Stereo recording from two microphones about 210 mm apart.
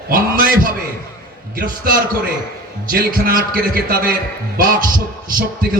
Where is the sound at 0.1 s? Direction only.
40° right (ahead or behind).